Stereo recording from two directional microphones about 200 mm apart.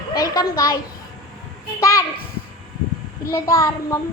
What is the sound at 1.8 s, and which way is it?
Speech, 15° left (ahead or behind).